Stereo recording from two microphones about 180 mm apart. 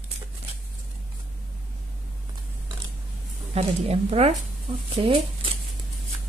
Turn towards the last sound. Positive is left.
turn(degrees=-30)  # may be behind; listen again after turning